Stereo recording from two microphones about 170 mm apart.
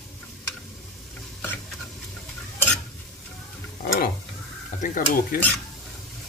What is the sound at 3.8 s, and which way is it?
Stir, 60° left (ahead or behind).